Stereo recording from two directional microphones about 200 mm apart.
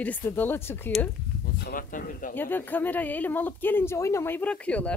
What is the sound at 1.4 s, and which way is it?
Speech, 45° left (ahead or behind).